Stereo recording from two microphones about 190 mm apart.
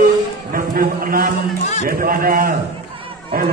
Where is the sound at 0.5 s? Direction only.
50° right (ahead or behind).